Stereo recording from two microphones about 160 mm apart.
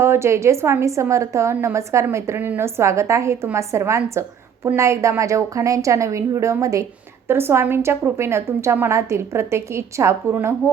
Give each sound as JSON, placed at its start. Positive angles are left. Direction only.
{"t": 0.0, "sound": "a woman's voice", "side_deg": -15}